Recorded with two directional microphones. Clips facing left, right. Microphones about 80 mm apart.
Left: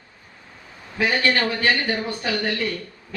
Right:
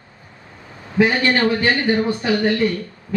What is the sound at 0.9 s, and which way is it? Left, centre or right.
Speech, right.